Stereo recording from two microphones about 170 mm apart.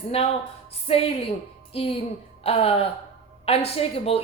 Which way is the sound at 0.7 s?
35° left (ahead or behind).